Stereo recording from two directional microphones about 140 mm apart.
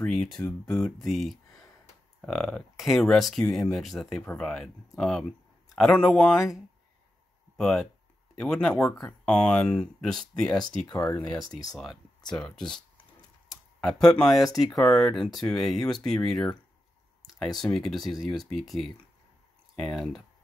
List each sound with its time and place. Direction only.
0.0 s speech: 5° left (ahead or behind)
11.7 s speech: centre (ahead or behind)
12.2 s speech: 30° left (ahead or behind)
12.4 s speech: 5° left (ahead or behind)
17.6 s speech: 5° left (ahead or behind)